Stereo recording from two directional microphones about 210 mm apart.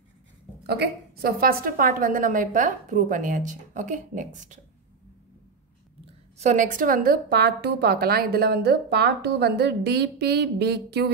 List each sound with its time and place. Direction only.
0.7 s a woman's voice: 50° right (ahead or behind)
6.3 s a woman's voice: 35° right (ahead or behind); by 11.1 s 50° right (ahead or behind)